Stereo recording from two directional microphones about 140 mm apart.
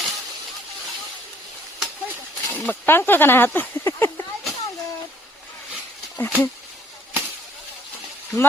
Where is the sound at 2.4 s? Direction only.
10° left (ahead or behind).